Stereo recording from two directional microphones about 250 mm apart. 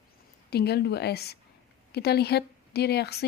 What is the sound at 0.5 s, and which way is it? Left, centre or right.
Speech, left.